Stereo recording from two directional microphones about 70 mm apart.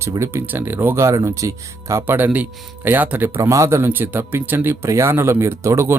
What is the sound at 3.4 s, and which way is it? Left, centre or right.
Speech, right.